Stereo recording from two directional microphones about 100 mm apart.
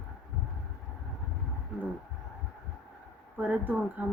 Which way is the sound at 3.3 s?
15° right (ahead or behind).